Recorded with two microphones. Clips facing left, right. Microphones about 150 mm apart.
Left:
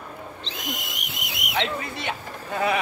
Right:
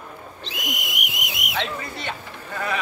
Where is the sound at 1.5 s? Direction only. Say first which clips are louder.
Left 2 dB; 20° left (ahead or behind).